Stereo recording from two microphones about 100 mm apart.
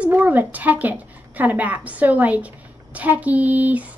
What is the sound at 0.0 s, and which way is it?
A woman's voice, 15° right (ahead or behind).